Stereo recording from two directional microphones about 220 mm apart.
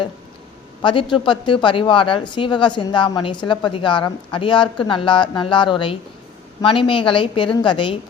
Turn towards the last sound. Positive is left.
turn(degrees=20)  # may be behind; listen again after turning